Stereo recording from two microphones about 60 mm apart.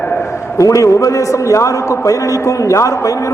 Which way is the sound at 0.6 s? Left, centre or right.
Left.